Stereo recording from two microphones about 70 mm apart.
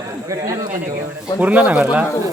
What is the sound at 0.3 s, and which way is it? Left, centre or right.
Speech, right.